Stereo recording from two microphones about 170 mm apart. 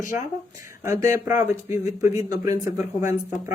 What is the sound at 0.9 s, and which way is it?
Speech, 15° right (ahead or behind).